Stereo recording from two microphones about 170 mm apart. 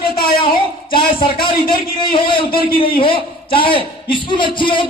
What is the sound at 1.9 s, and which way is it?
A man's voice, 30° left (ahead or behind).